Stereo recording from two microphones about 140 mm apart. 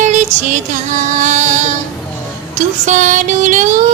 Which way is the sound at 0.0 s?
60° right (ahead or behind).